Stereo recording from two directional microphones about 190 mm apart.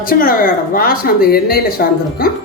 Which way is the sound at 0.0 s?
50° left (ahead or behind).